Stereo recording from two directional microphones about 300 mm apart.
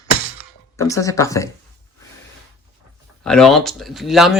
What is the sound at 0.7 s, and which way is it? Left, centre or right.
Speech, centre.